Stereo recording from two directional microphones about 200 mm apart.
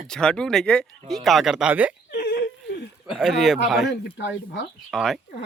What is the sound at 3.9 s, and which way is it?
Speech, 65° left (ahead or behind).